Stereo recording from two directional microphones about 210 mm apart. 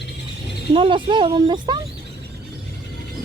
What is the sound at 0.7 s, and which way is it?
Speech, 25° right (ahead or behind).